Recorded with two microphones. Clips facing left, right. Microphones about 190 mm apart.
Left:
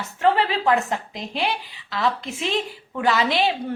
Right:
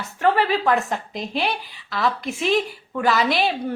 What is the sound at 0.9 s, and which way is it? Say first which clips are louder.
A woman's voice: right 1 dB; 20° left (ahead or behind).